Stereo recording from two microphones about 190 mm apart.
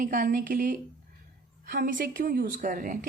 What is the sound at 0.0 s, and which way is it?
Speech, 45° right (ahead or behind).